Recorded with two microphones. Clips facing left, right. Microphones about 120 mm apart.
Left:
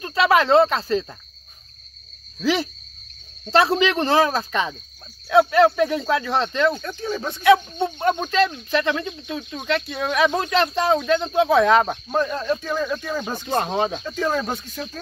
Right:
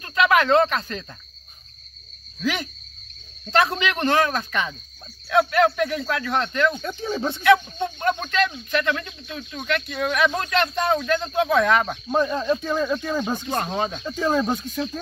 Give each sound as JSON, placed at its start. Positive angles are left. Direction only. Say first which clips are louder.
{"t": 0.0, "sound": "speech", "louder": "left 1 dB", "side_deg": 30}
{"t": 2.4, "sound": "speech", "louder": "left 5 dB", "side_deg": 30}
{"t": 6.8, "sound": "speech", "louder": "right 1 dB", "side_deg": -15}
{"t": 7.4, "sound": "speech", "louder": "left 2 dB", "side_deg": 25}
{"t": 12.1, "sound": "speech", "louder": "right 1 dB", "side_deg": -10}
{"t": 13.6, "sound": "speech", "louder": "left 3 dB", "side_deg": 25}
{"t": 14.0, "sound": "speech", "louder": "right 1 dB", "side_deg": -15}